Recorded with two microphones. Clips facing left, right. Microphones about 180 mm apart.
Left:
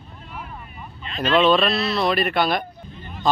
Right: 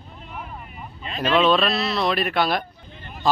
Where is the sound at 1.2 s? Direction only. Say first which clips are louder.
Left 1 dB; centre (ahead or behind).